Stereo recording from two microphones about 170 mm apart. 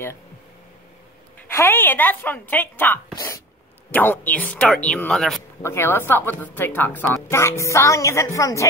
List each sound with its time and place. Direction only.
1.5 s a woman's voice: 15° left (ahead or behind)
5.6 s a woman's voice: 15° left (ahead or behind)